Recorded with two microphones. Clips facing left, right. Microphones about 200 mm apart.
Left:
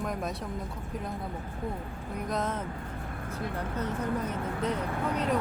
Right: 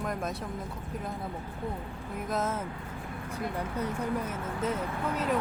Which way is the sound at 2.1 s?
5° right (ahead or behind).